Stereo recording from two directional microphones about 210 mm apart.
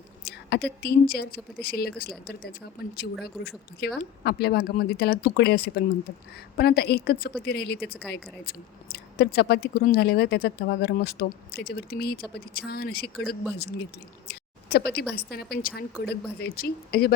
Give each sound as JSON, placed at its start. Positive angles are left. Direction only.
{"t": 0.3, "sound": "speech", "side_deg": 50}
{"t": 14.3, "sound": "a sound", "side_deg": 50}
{"t": 15.1, "sound": "speech", "side_deg": 45}